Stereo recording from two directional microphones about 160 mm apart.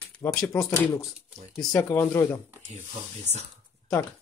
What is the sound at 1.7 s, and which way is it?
Speech, 20° left (ahead or behind).